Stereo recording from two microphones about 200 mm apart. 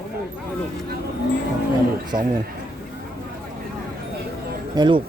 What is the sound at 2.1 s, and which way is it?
Speech, 20° right (ahead or behind).